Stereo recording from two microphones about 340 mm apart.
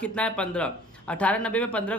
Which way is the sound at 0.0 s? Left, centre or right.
Centre.